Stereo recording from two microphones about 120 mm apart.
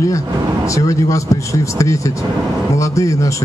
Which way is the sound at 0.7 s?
25° left (ahead or behind).